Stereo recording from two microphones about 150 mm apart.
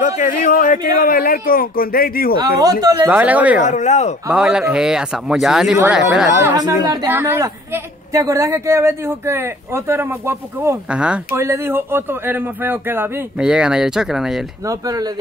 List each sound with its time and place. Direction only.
0.0 s a man's voice: 60° left (ahead or behind); by 2.3 s 75° left (ahead or behind)
2.6 s speech: 25° right (ahead or behind)
3.1 s a woman's voice: 10° right (ahead or behind)
3.6 s speech: 55° left (ahead or behind)
4.3 s speech: 5° right (ahead or behind)
6.4 s speech: 25° right (ahead or behind)
7.1 s a woman's voice: 15° right (ahead or behind)
14.7 s speech: 25° right (ahead or behind)